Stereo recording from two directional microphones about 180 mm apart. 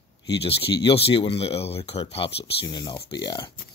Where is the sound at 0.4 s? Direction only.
30° left (ahead or behind).